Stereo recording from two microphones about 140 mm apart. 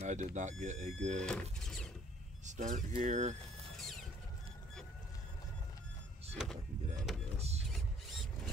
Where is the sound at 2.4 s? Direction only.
60° right (ahead or behind).